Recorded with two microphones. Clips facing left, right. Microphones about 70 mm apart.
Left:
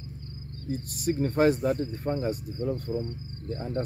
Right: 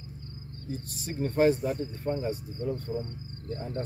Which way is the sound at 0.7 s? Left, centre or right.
Left.